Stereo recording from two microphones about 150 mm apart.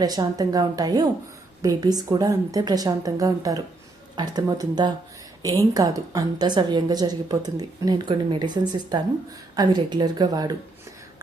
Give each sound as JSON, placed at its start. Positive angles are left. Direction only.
{"t": 0.0, "sound": "a woman's voice", "side_deg": -25}